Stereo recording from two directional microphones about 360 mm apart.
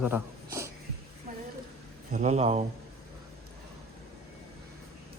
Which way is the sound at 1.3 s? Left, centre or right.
Right.